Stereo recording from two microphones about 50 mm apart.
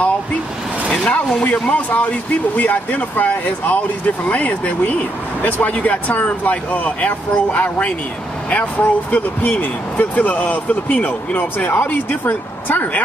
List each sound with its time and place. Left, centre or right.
1.0 s speech: left